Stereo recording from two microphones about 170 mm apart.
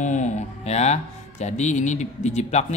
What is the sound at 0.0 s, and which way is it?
Speech, 45° left (ahead or behind).